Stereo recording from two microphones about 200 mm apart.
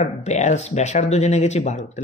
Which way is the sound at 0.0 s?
35° left (ahead or behind).